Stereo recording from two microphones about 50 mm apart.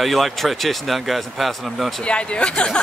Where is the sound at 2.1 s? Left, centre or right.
Left.